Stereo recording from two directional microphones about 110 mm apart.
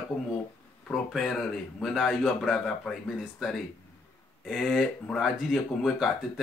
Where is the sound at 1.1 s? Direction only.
Centre (ahead or behind).